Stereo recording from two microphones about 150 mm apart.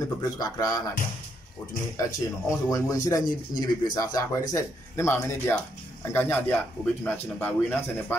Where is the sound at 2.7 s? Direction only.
20° left (ahead or behind).